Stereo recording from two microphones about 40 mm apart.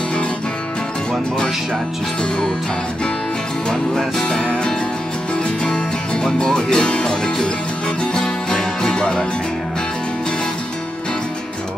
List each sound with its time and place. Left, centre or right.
3.9 s music: centre